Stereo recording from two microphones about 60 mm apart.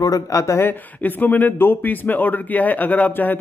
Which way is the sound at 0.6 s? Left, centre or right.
Left.